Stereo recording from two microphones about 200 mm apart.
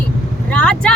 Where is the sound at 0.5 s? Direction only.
5° left (ahead or behind).